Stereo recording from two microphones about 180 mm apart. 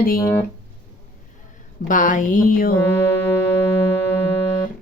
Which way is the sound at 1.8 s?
45° left (ahead or behind).